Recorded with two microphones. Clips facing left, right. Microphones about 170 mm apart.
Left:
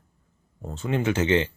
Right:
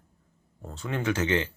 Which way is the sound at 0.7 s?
20° left (ahead or behind).